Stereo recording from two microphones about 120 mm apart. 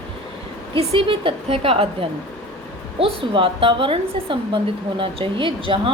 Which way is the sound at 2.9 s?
50° right (ahead or behind).